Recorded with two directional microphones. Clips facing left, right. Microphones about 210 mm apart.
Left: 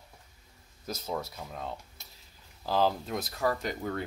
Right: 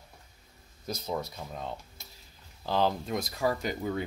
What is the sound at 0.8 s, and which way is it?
Speech, 5° left (ahead or behind).